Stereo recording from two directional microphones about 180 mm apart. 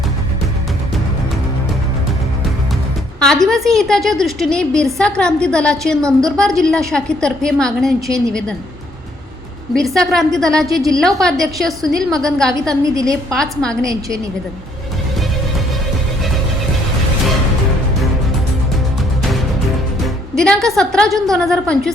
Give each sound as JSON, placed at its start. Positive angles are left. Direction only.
{"t": 3.4, "sound": "a woman's voice", "side_deg": 0}
{"t": 9.7, "sound": "a woman's voice", "side_deg": 5}
{"t": 10.7, "sound": "a woman's voice", "side_deg": -20}
{"t": 11.0, "sound": "a woman's voice", "side_deg": 5}
{"t": 12.8, "sound": "a woman's voice", "side_deg": -20}
{"t": 13.3, "sound": "a woman's voice", "side_deg": 5}
{"t": 20.3, "sound": "a woman's voice", "side_deg": 5}